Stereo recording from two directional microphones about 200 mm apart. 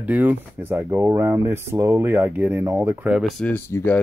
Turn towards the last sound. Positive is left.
turn(degrees=10)  # may be behind; listen again after turning